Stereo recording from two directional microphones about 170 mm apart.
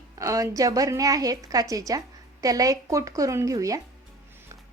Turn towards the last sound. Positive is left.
turn(degrees=-20)  # may be behind; listen again after turning